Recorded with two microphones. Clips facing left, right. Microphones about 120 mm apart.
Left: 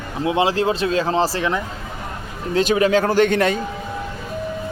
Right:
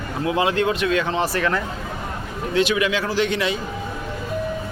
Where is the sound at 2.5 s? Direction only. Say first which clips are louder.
Left 4 dB; 40° left (ahead or behind).